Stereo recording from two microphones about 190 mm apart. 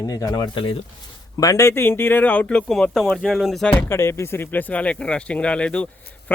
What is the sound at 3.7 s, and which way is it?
Speech, 15° left (ahead or behind).